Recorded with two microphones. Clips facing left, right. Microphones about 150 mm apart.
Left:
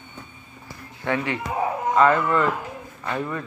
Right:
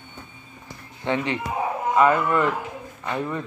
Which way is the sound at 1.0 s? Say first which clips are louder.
Right 1 dB; 20° right (ahead or behind).